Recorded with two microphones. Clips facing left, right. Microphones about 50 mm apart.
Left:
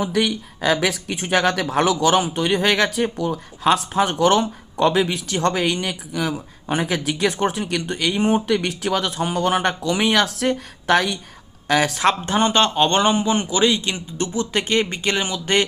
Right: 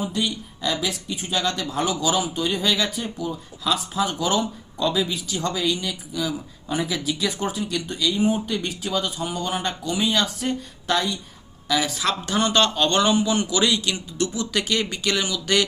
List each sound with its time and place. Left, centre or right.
0.0 s speech: left
11.7 s speech: left
12.0 s speech: left